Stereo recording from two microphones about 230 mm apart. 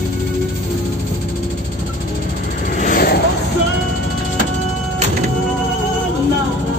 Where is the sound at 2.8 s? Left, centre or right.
Left.